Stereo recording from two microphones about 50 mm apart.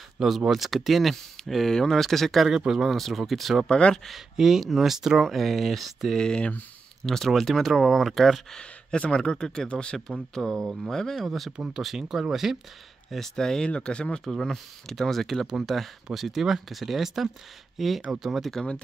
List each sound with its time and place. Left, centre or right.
0.5 s speech: centre
2.4 s speech: centre
2.8 s speech: centre
3.7 s speech: centre
4.4 s speech: centre
6.1 s speech: centre
7.1 s speech: centre
8.5 s speech: centre
10.4 s speech: centre
10.8 s speech: centre
11.5 s speech: centre
11.8 s speech: centre
13.1 s speech: centre
14.2 s speech: centre